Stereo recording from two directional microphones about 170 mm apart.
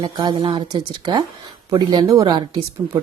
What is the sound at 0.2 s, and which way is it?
Speech, 25° right (ahead or behind).